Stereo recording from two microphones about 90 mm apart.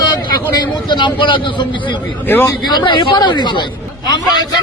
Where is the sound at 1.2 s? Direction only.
65° left (ahead or behind).